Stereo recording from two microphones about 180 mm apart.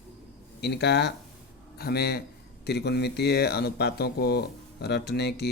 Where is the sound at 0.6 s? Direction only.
70° left (ahead or behind).